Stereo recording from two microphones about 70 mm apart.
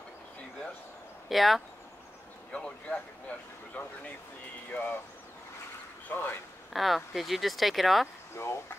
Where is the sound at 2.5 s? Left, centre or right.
Centre.